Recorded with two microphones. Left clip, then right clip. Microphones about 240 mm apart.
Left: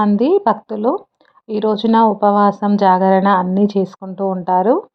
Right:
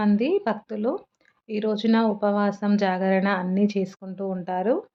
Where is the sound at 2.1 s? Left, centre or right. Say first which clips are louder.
Left 11 dB; centre.